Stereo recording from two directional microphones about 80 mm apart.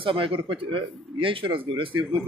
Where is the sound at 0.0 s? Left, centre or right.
Right.